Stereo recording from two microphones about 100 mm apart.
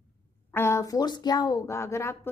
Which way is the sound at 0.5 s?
25° left (ahead or behind).